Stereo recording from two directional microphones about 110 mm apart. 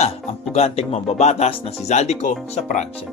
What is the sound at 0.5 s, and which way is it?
Speech, 70° left (ahead or behind).